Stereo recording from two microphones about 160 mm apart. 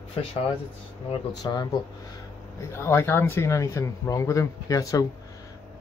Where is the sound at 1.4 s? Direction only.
20° left (ahead or behind).